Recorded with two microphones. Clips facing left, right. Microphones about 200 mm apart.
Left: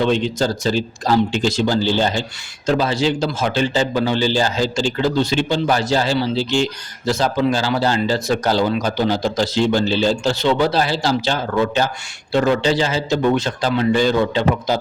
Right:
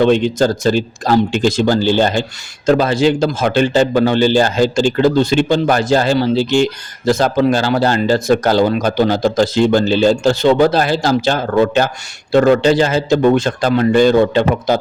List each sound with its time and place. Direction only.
0.0 s a man's voice: 55° right (ahead or behind)